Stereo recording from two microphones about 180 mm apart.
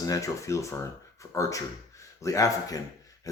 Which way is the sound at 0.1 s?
20° left (ahead or behind).